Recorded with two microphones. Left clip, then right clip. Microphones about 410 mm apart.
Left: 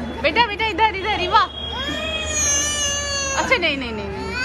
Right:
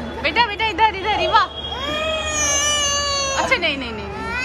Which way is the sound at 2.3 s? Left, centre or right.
Centre.